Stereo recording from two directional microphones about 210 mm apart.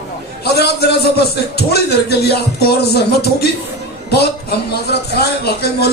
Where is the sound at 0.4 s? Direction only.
50° left (ahead or behind).